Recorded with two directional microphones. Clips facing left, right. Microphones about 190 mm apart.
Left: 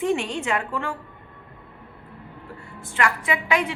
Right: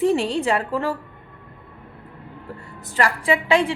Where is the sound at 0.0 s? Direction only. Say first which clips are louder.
Right 5 dB; 35° right (ahead or behind).